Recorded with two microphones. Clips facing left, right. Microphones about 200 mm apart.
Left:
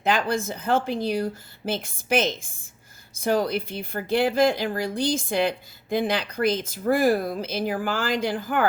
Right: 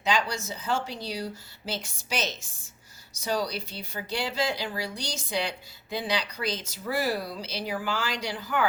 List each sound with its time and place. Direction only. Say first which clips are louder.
0.0 s speech: left 5 dB; 55° left (ahead or behind)